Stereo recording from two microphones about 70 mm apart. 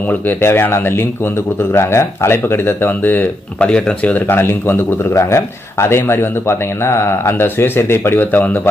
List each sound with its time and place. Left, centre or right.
0.1 s speech: left
3.7 s speech: centre
4.4 s speech: left
5.1 s speech: left